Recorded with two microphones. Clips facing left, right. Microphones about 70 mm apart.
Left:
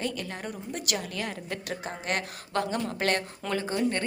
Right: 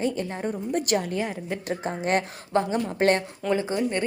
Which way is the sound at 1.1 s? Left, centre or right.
Right.